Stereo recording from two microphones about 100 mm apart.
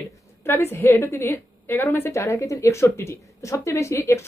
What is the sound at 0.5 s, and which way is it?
Speech, 25° left (ahead or behind).